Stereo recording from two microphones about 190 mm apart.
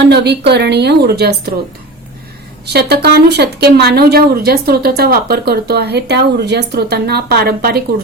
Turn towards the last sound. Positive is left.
turn(degrees=-55)  # may be behind; listen again after turning